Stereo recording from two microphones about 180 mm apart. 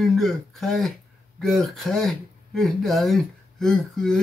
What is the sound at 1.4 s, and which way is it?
Speech, centre (ahead or behind).